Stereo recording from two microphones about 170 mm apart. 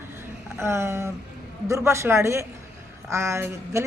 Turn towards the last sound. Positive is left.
turn(degrees=-15)  # may be behind; listen again after turning